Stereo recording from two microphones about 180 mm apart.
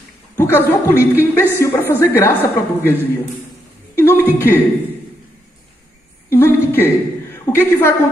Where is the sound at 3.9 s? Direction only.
15° left (ahead or behind).